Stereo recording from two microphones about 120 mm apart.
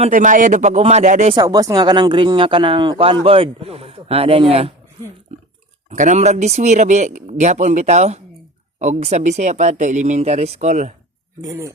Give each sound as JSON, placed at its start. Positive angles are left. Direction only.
{"t": 0.0, "sound": "speech", "side_deg": -90}
{"t": 1.4, "sound": "speech", "side_deg": -30}
{"t": 5.9, "sound": "speech", "side_deg": -80}
{"t": 11.3, "sound": "speech", "side_deg": -30}